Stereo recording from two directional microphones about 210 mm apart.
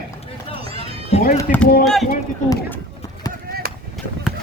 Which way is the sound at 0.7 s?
30° left (ahead or behind).